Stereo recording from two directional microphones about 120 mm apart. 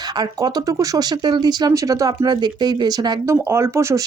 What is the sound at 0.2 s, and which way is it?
Speech, 35° right (ahead or behind).